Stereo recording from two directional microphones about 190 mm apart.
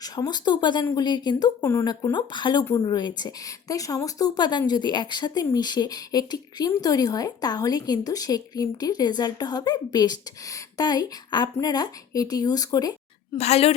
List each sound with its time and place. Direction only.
0.0 s a woman's voice: 20° left (ahead or behind)
13.3 s a woman's voice: 35° left (ahead or behind)